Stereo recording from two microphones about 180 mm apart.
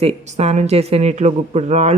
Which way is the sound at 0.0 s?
35° right (ahead or behind).